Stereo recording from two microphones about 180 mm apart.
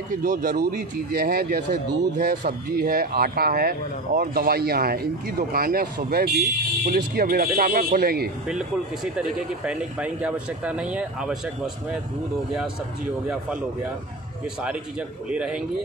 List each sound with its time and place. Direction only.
0.1 s speech: 50° right (ahead or behind)
8.5 s speech: 5° right (ahead or behind)
14.6 s speech: 5° right (ahead or behind)